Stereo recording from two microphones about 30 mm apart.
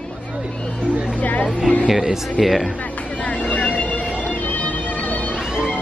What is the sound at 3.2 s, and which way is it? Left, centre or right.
Music, left.